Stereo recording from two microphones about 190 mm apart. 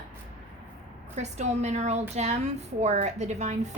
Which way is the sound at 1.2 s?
35° right (ahead or behind).